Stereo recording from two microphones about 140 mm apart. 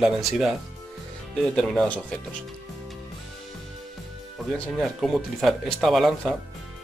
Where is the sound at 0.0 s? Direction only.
5° right (ahead or behind).